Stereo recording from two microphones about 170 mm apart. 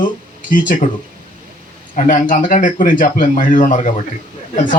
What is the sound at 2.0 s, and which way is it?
Speech, 50° left (ahead or behind).